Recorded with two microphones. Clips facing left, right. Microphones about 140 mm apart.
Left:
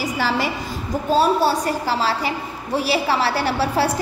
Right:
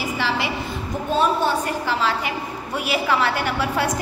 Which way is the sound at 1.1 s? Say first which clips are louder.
Left 3 dB; 35° left (ahead or behind).